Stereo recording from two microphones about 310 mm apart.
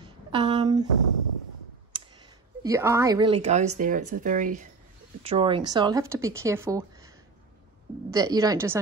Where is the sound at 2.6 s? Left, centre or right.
Centre.